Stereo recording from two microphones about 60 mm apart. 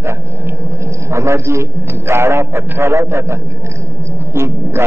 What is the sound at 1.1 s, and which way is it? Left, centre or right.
A man's voice, right.